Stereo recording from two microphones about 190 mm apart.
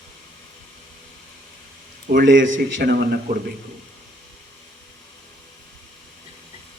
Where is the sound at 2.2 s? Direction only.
75° right (ahead or behind); by 3.2 s 60° right (ahead or behind).